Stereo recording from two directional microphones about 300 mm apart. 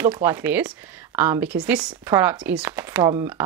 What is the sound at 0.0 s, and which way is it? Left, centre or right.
Speech, centre.